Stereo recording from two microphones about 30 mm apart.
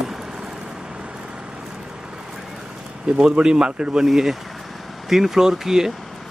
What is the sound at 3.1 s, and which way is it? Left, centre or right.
Speech, right.